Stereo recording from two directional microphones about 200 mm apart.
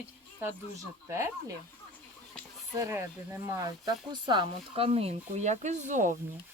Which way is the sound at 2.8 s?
10° right (ahead or behind).